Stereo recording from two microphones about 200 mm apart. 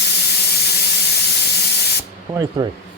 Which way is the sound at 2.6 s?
20° right (ahead or behind).